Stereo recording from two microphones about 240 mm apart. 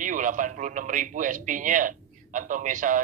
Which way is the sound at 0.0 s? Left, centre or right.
Right.